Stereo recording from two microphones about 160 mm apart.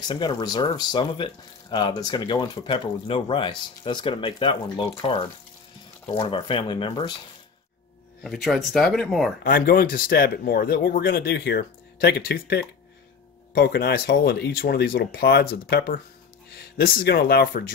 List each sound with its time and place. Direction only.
0.1 s speech: 25° left (ahead or behind)
8.2 s speech: centre (ahead or behind)
9.4 s speech: 70° left (ahead or behind)